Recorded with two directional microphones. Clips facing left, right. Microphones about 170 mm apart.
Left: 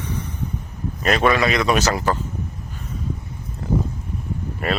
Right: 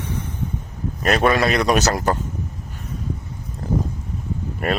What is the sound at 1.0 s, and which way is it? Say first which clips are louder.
Speech: right 1 dB; 40° right (ahead or behind).